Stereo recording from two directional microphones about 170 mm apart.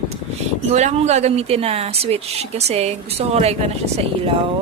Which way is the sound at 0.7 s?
45° right (ahead or behind).